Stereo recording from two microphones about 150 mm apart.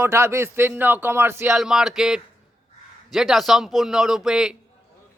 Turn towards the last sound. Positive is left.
turn(degrees=-5)  # may be behind; listen again after turning